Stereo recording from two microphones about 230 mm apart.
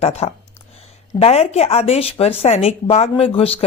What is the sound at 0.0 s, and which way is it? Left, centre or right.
Speech, left.